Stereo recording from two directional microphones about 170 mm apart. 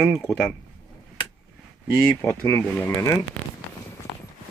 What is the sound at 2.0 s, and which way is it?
Speech, 10° left (ahead or behind).